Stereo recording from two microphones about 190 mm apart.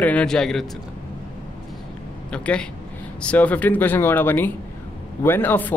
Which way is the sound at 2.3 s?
5° left (ahead or behind).